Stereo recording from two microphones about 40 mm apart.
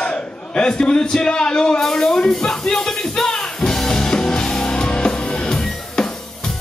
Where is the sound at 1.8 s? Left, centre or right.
Centre.